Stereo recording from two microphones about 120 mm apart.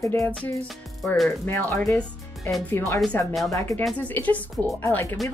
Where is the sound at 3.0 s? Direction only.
5° left (ahead or behind).